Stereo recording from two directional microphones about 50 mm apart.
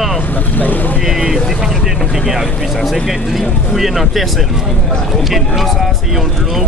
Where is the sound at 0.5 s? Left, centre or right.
Left.